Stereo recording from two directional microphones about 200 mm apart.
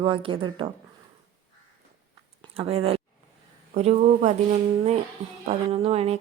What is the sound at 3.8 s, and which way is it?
Speech, 35° right (ahead or behind).